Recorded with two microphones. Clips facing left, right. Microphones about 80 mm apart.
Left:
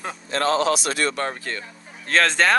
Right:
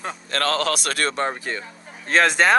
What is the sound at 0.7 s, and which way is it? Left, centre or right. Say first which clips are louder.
Speech: left 2 dB; right.